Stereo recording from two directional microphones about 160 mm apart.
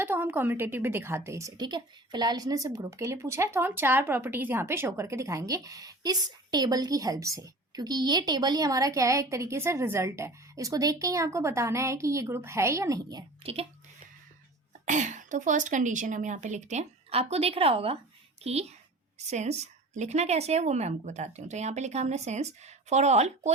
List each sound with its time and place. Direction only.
0.0 s a woman's voice: 15° right (ahead or behind)
13.4 s speech: 35° right (ahead or behind)
14.8 s a woman's voice: 50° right (ahead or behind)